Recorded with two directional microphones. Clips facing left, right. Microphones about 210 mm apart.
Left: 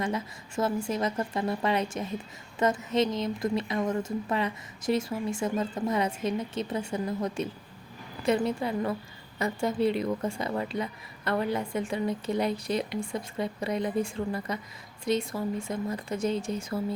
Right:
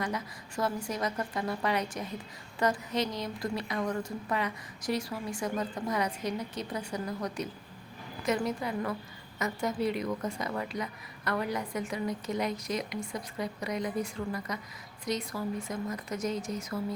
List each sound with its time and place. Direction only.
0.0 s a woman's voice: 25° left (ahead or behind)